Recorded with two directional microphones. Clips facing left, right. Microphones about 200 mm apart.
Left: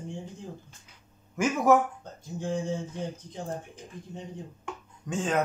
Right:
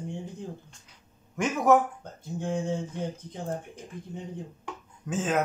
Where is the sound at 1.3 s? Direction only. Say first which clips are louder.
Even; centre (ahead or behind).